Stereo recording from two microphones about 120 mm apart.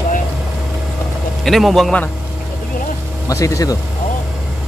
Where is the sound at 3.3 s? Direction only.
25° left (ahead or behind).